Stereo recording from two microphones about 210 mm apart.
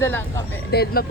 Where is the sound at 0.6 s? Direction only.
50° left (ahead or behind).